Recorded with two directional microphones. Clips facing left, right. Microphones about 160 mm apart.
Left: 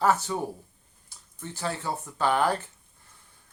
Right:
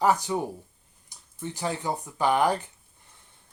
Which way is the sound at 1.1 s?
15° right (ahead or behind).